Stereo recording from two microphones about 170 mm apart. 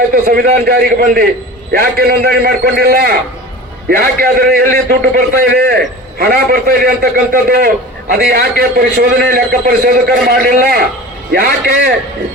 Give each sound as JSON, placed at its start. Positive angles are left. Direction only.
{"t": 0.1, "sound": "a man's voice", "side_deg": -65}